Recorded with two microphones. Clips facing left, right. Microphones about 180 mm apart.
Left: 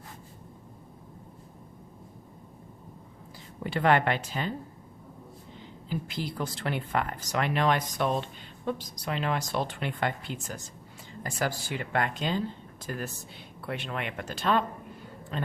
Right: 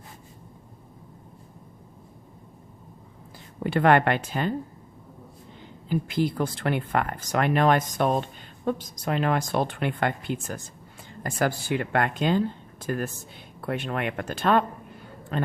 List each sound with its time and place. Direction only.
3.6 s speech: 55° right (ahead or behind)
5.9 s speech: 55° right (ahead or behind)